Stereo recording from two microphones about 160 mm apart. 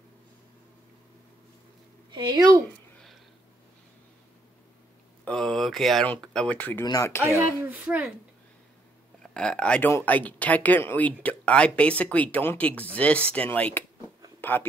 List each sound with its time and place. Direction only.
2.0 s speech: 30° right (ahead or behind)
5.2 s speech: 5° left (ahead or behind)
7.6 s speech: 10° right (ahead or behind)
9.2 s speech: 5° left (ahead or behind)